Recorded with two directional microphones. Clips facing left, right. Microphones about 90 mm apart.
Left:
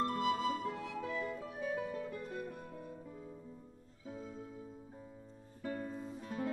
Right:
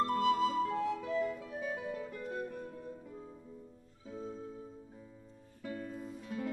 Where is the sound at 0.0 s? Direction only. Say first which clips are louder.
Right 4 dB; 35° right (ahead or behind).